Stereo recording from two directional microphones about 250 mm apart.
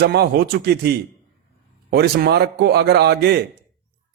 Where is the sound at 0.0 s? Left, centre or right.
Right.